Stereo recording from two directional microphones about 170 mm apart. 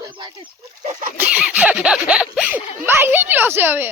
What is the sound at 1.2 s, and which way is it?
Speech, 10° right (ahead or behind).